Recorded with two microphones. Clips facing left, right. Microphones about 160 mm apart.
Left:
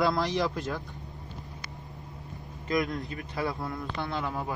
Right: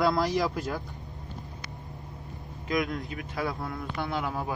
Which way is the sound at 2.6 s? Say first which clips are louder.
Even; centre (ahead or behind).